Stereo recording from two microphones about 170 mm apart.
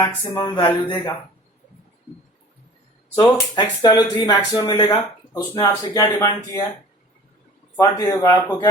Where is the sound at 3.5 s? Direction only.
25° left (ahead or behind).